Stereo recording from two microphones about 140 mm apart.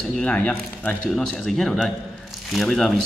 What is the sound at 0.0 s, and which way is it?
Speech, 5° left (ahead or behind).